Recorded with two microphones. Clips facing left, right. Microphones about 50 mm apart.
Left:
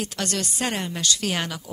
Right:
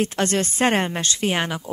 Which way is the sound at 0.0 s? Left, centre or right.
Right.